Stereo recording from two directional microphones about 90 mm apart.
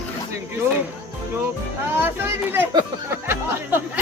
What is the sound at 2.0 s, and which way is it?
Speech, 25° right (ahead or behind).